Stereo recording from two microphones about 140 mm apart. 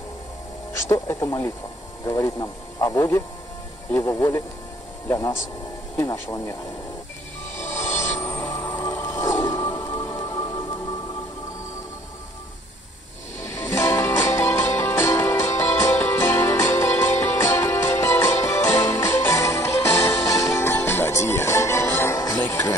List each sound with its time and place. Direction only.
0.8 s speech: 25° left (ahead or behind)
7.9 s music: 60° left (ahead or behind)
8.2 s music: 20° left (ahead or behind)
13.5 s music: 20° left (ahead or behind)